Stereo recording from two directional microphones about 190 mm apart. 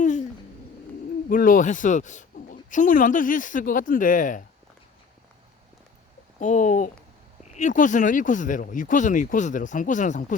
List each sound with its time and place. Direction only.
0.0 s a sound: 40° left (ahead or behind)
1.3 s speech: 45° left (ahead or behind)
6.4 s speech: 40° left (ahead or behind)